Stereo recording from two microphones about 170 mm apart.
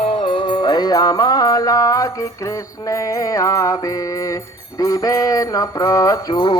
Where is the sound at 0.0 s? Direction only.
30° left (ahead or behind).